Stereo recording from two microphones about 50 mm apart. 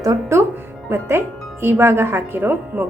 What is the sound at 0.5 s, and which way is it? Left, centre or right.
Speech, right.